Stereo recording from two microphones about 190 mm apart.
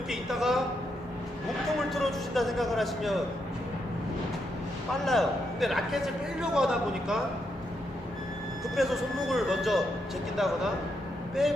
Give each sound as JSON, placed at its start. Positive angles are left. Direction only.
{"t": 0.1, "sound": "a sound", "side_deg": 0}
{"t": 1.9, "sound": "a man's voice", "side_deg": 0}
{"t": 5.0, "sound": "a man's voice", "side_deg": 0}
{"t": 8.7, "sound": "a man's voice", "side_deg": 0}
{"t": 11.4, "sound": "a man's voice", "side_deg": 0}